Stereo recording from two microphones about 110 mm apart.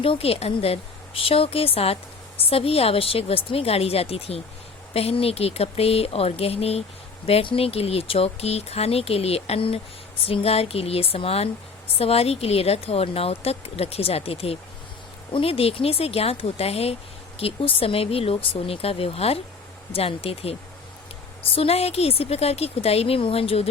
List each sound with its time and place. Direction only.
0.0 s speech: 60° left (ahead or behind)